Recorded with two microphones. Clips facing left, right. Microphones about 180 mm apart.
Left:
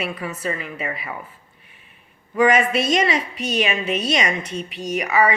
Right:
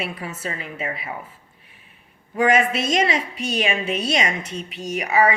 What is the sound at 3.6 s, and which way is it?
Speech, 30° right (ahead or behind).